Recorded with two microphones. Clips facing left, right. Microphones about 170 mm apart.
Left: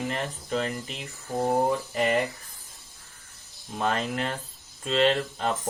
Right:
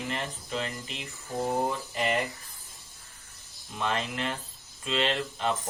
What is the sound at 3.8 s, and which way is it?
Speech, 40° left (ahead or behind).